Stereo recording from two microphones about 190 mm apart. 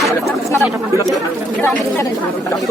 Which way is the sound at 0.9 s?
15° right (ahead or behind).